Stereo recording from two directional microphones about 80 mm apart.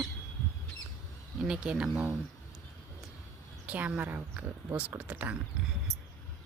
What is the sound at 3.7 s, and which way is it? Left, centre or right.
Speech, centre.